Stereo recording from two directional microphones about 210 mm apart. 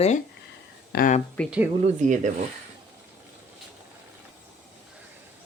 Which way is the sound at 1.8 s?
35° right (ahead or behind).